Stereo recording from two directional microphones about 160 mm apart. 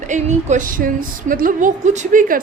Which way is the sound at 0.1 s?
50° right (ahead or behind).